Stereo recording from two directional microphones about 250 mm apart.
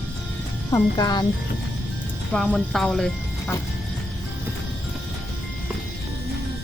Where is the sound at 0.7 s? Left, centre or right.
Centre.